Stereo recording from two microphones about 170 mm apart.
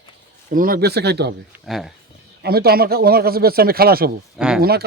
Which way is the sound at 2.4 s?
65° right (ahead or behind).